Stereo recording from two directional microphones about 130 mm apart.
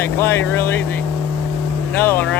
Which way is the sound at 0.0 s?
20° left (ahead or behind).